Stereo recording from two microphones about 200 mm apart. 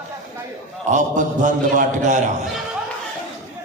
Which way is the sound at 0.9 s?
40° right (ahead or behind).